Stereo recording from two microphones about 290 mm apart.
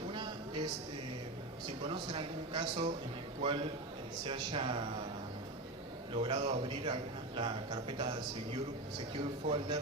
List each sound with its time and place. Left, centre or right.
0.1 s a sound: centre
1.6 s a man's voice: centre
6.1 s a man's voice: centre